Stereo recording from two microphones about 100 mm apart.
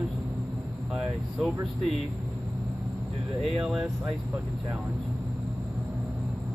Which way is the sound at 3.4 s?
5° right (ahead or behind).